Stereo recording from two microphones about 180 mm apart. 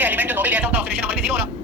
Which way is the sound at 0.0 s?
10° right (ahead or behind).